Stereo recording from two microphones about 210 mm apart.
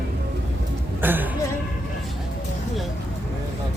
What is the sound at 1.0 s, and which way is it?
Speech, 10° right (ahead or behind).